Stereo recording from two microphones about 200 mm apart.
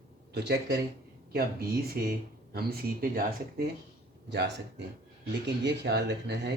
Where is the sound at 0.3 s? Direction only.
55° right (ahead or behind).